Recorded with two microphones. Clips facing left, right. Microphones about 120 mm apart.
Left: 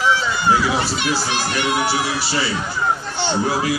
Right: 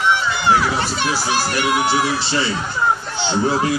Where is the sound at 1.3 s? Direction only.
40° right (ahead or behind).